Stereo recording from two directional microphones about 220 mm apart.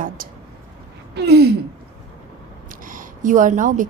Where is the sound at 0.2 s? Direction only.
40° right (ahead or behind).